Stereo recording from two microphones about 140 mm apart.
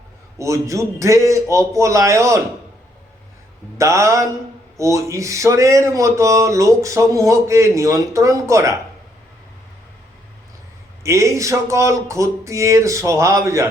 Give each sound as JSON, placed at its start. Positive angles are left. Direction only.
{"t": 0.3, "sound": "speech", "side_deg": -20}
{"t": 3.8, "sound": "speech", "side_deg": -20}
{"t": 11.0, "sound": "speech", "side_deg": -20}